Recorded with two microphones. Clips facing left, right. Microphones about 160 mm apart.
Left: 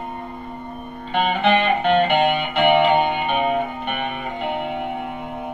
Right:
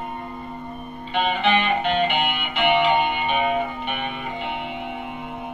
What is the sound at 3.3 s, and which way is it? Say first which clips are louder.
Music: left 2 dB; 50° left (ahead or behind).